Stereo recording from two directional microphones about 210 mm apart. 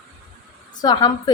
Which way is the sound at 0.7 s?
20° left (ahead or behind).